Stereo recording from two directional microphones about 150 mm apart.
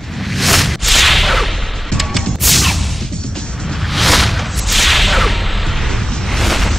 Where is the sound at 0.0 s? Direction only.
Centre (ahead or behind).